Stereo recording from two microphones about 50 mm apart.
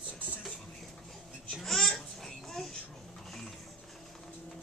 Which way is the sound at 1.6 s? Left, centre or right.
Centre.